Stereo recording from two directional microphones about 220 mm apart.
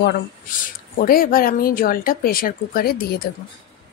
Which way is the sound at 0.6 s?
40° left (ahead or behind).